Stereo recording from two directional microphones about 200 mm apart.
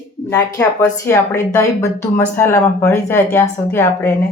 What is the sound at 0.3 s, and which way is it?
Speech, 15° left (ahead or behind).